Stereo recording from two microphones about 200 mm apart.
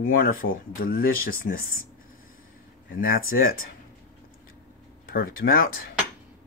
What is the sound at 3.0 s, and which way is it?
Speech, 45° left (ahead or behind).